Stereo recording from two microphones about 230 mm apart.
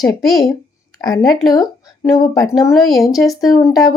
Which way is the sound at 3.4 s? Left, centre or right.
Centre.